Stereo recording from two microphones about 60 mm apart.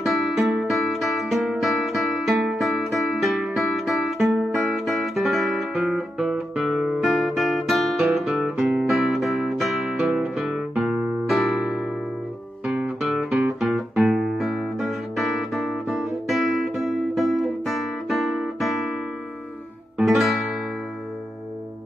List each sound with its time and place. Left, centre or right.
0.0 s music: centre
6.5 s guitar: centre
8.5 s music: right
8.8 s music: centre
10.3 s guitar: centre
10.9 s music: centre
11.2 s music: centre
11.6 s music: centre
12.6 s guitar: centre
13.0 s guitar: centre
20.0 s music: centre